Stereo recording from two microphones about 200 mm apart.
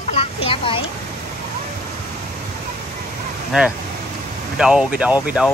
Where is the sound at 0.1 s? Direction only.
25° left (ahead or behind).